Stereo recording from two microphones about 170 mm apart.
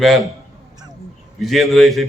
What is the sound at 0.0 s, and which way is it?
Speech, centre (ahead or behind).